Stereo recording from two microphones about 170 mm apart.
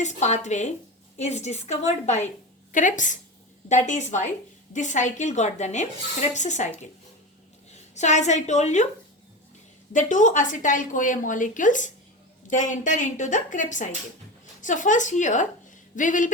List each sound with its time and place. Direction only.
0.0 s a woman's voice: 45° left (ahead or behind)
7.7 s a woman's voice: 45° left (ahead or behind)
9.9 s a woman's voice: 50° left (ahead or behind)